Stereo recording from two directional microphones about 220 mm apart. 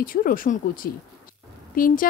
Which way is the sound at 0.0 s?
40° left (ahead or behind).